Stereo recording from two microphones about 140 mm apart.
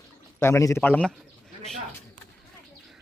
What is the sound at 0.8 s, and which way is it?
Speech, 10° left (ahead or behind).